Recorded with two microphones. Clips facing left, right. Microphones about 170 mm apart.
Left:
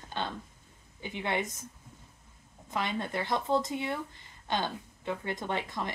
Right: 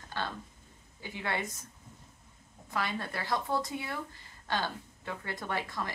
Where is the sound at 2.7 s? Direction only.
20° left (ahead or behind).